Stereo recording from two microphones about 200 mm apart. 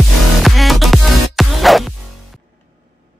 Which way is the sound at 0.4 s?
Centre (ahead or behind).